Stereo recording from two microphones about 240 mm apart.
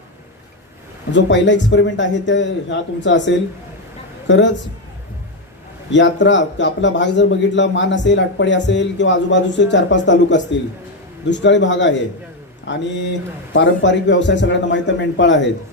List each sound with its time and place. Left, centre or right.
1.1 s a man's voice: left
5.9 s a man's voice: left